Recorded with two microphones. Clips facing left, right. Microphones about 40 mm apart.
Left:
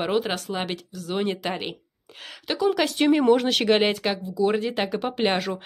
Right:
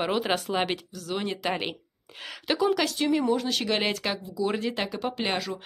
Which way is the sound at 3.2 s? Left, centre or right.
Left.